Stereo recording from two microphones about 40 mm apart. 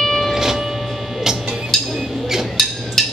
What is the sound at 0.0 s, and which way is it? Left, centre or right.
Train, centre.